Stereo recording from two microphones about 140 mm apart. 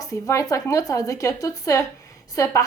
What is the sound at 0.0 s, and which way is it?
A woman's voice, 25° left (ahead or behind).